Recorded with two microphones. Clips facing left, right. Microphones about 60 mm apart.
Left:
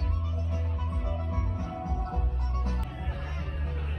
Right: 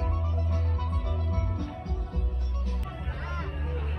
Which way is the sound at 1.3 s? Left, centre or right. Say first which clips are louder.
Right 1 dB; right.